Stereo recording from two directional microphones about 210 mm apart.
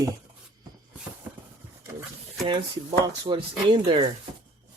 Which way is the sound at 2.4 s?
20° right (ahead or behind).